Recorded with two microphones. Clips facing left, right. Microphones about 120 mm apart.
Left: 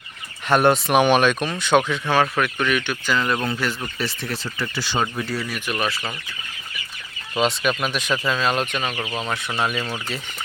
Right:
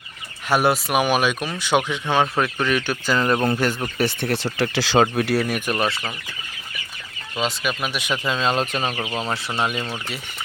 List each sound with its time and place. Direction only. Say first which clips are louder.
0.4 s speech: left 2 dB; 5° right (ahead or behind); by 3.3 s 35° right (ahead or behind)
3.3 s speech: right 4 dB; 25° right (ahead or behind)
3.9 s speech: right 6 dB; 55° right (ahead or behind)
4.5 s speech: right 7 dB; 85° right; by 5.7 s 50° right (ahead or behind)
5.7 s speech: even; 30° right (ahead or behind)
7.4 s speech: left 3 dB; 5° right (ahead or behind); by 8.6 s 25° right (ahead or behind)
8.9 s speech: right 1 dB; 10° right (ahead or behind)